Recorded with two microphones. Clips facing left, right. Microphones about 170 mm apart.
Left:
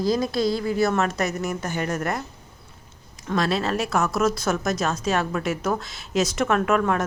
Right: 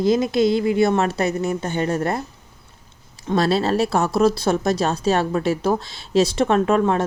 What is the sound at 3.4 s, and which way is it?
Speech, 35° right (ahead or behind).